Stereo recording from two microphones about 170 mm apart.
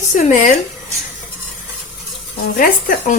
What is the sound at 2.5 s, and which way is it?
Speech, 55° left (ahead or behind).